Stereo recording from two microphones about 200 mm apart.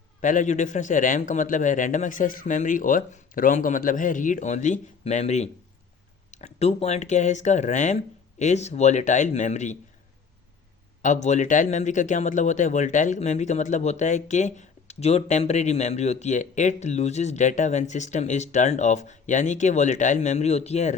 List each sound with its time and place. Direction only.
0.2 s speech: 40° left (ahead or behind)
11.0 s speech: 35° left (ahead or behind)